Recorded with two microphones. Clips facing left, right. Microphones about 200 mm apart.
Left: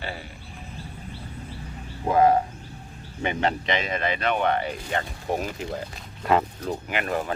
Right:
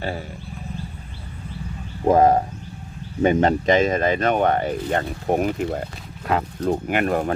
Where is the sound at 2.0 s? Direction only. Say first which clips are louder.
Right 4 dB; 40° right (ahead or behind).